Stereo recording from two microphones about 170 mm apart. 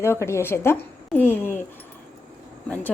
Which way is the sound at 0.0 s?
15° left (ahead or behind).